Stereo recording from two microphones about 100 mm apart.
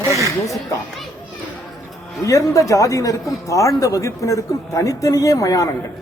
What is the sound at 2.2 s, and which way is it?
A man's voice, 35° left (ahead or behind).